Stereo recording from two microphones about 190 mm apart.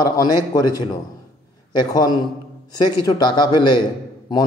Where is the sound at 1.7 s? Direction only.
20° left (ahead or behind).